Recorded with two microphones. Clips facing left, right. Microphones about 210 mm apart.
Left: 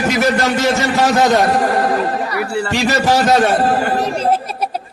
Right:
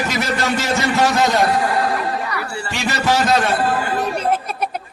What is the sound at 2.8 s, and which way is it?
Speech, 40° left (ahead or behind).